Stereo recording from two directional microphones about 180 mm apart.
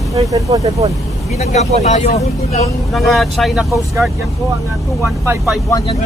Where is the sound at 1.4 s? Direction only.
40° left (ahead or behind).